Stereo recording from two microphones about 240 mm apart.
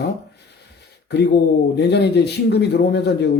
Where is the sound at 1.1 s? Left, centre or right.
Left.